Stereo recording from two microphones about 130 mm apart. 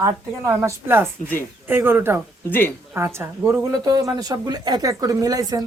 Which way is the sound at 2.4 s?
15° left (ahead or behind).